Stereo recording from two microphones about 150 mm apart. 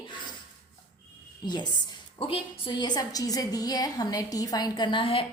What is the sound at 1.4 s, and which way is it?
A woman's voice, 30° left (ahead or behind).